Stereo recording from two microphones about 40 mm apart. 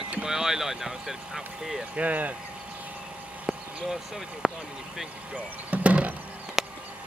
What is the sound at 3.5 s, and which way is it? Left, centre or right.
Vehicle, centre.